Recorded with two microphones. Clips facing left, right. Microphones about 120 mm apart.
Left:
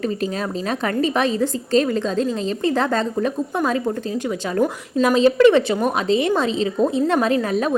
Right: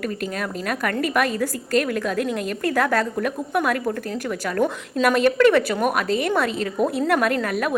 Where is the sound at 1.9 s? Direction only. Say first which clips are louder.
Left 3 dB; 65° right (ahead or behind).